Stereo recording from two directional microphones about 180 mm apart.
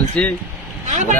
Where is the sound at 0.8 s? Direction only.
45° right (ahead or behind).